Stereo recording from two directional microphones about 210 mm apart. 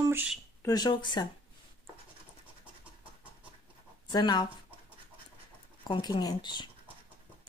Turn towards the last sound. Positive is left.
turn(degrees=20)  # may be behind; listen again after turning